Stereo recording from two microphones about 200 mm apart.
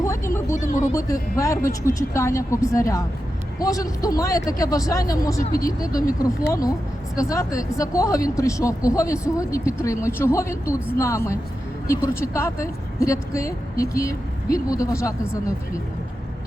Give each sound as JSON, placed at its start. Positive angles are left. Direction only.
{"t": 0.0, "sound": "a sound", "side_deg": 15}
{"t": 0.5, "sound": "speech", "side_deg": 40}
{"t": 0.9, "sound": "speech", "side_deg": 15}